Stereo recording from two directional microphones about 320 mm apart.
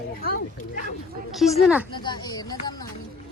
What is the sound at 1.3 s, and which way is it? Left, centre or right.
Speech, centre.